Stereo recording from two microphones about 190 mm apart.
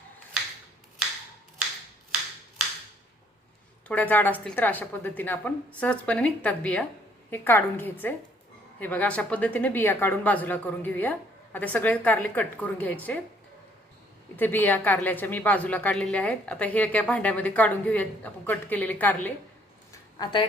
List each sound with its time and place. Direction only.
3.8 s a woman's voice: 10° left (ahead or behind)
14.3 s a woman's voice: 10° left (ahead or behind)
19.9 s a sound: 20° left (ahead or behind)